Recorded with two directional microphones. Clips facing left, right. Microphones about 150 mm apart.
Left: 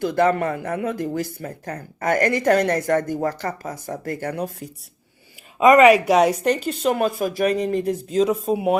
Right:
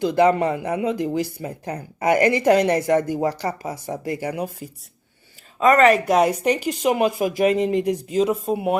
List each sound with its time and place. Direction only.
0.0 s speech: 15° right (ahead or behind)
5.5 s speech: 15° left (ahead or behind)
6.4 s speech: 10° right (ahead or behind)
8.1 s speech: 10° right (ahead or behind)